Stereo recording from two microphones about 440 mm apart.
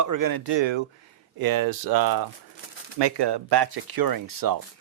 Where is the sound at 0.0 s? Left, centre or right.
Right.